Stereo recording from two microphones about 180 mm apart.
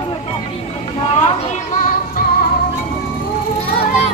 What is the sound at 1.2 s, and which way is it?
Music, 40° left (ahead or behind).